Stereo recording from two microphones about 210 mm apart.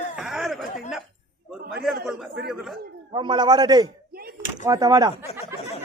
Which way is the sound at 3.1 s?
20° right (ahead or behind).